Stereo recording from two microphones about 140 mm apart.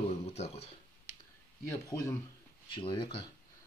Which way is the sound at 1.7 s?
20° left (ahead or behind).